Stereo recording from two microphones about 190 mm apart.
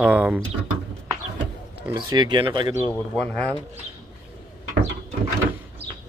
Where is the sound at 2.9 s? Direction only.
5° left (ahead or behind).